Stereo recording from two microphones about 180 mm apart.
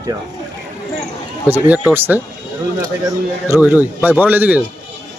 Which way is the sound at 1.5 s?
10° right (ahead or behind).